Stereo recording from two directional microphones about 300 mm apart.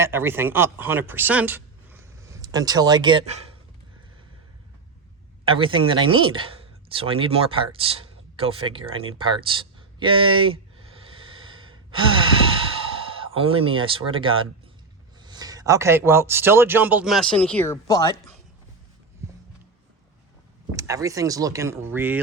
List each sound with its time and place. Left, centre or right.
0.0 s speech: centre
5.5 s speech: centre
10.0 s gasp: centre
12.8 s speech: centre
20.7 s speech: centre